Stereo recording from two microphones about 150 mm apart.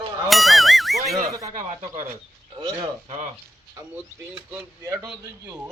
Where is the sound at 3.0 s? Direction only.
45° right (ahead or behind).